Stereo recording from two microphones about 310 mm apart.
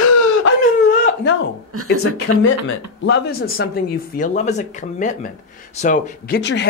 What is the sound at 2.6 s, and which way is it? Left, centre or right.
Speech, left.